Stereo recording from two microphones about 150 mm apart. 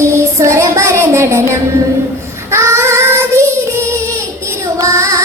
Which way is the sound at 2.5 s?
20° right (ahead or behind).